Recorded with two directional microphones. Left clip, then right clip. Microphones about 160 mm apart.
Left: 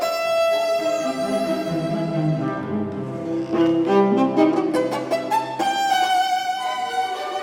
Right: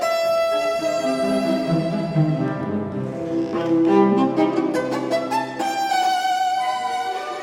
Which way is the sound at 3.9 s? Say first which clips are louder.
Even; 20° left (ahead or behind).